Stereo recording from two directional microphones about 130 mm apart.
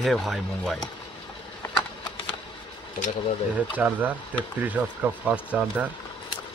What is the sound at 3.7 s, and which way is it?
Speech, 10° right (ahead or behind).